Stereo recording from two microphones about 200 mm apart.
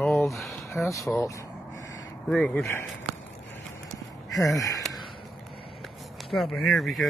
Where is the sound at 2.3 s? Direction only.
5° left (ahead or behind).